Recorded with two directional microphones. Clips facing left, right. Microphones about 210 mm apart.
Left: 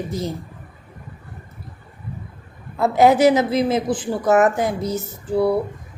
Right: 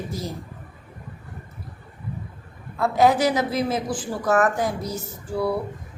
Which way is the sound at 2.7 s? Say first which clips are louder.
Left 4 dB; 25° left (ahead or behind).